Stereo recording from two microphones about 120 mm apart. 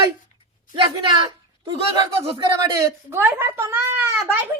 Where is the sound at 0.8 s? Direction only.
40° right (ahead or behind).